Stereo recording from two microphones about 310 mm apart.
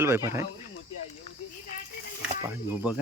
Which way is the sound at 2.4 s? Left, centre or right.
Centre.